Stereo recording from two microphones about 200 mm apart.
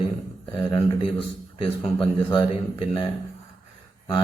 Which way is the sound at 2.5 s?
30° left (ahead or behind).